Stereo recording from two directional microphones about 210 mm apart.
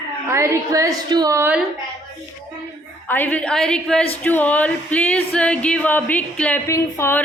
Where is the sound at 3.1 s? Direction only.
10° left (ahead or behind).